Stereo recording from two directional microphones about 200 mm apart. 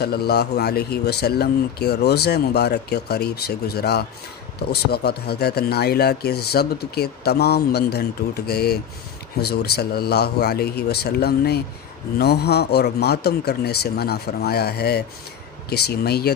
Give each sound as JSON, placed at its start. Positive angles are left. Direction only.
{"t": 0.0, "sound": "speech", "side_deg": 50}